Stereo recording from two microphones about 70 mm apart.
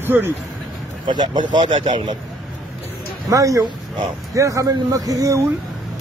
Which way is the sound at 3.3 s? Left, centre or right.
Right.